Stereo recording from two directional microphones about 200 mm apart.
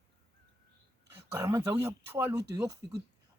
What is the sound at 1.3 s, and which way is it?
Speech, 10° right (ahead or behind).